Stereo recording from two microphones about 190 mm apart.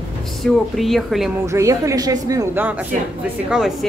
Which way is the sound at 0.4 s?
Centre (ahead or behind).